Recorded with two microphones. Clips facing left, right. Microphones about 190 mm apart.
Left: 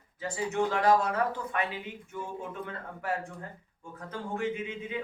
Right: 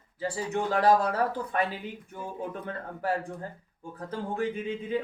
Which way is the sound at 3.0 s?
35° right (ahead or behind).